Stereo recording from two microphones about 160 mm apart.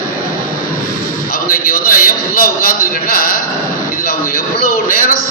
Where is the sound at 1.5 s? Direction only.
65° left (ahead or behind).